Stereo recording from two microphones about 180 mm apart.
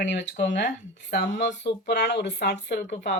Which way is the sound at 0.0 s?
75° left (ahead or behind).